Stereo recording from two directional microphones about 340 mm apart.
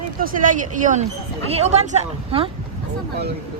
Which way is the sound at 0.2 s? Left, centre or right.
Right.